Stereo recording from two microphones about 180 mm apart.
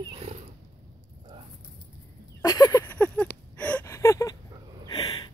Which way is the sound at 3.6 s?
10° left (ahead or behind).